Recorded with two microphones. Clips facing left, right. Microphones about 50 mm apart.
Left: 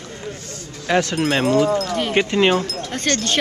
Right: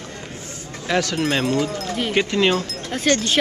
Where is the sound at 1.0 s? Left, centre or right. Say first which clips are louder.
Left 2 dB; left.